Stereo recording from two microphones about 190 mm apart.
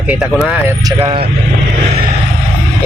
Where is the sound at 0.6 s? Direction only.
20° right (ahead or behind).